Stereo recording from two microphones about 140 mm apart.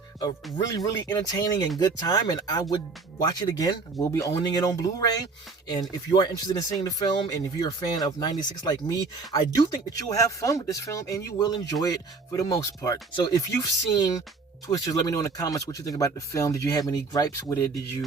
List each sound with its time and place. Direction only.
0.7 s speech: 25° left (ahead or behind)